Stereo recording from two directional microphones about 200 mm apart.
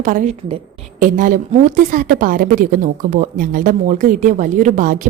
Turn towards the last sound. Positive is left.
turn(degrees=-40)  # may be behind; listen again after turning